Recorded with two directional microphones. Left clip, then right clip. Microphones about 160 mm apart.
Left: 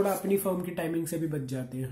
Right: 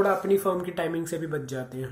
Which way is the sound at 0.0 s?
15° left (ahead or behind).